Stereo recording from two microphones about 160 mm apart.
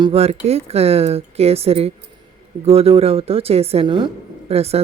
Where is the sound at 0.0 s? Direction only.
40° right (ahead or behind).